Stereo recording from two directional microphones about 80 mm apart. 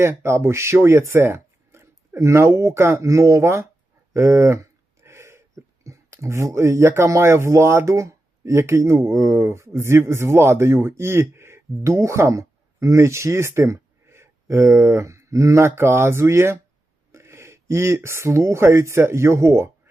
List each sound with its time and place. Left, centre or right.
0.0 s speech: right